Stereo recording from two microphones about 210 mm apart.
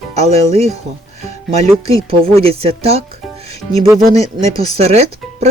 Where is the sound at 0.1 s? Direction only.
30° right (ahead or behind).